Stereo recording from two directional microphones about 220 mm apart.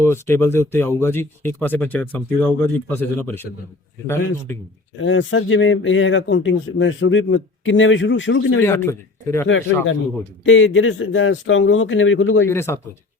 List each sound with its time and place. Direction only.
0.0 s speech: 10° left (ahead or behind)
4.5 s speech: 10° left (ahead or behind)
4.9 s speech: 60° left (ahead or behind)
8.6 s speech: 10° left (ahead or behind)
9.5 s speech: 60° left (ahead or behind)
12.5 s speech: 10° left (ahead or behind)